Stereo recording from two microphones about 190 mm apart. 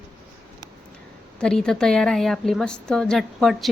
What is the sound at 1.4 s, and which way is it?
A woman's voice, 5° left (ahead or behind).